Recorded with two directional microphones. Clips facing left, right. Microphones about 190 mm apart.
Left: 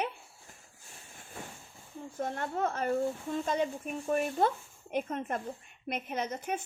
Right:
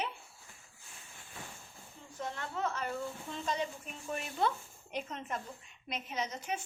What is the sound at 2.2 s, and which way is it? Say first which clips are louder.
A woman's voice: left 5 dB; 50° left (ahead or behind).